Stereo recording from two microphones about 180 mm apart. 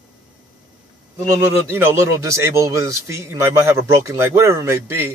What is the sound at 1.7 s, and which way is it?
Speech, 15° right (ahead or behind).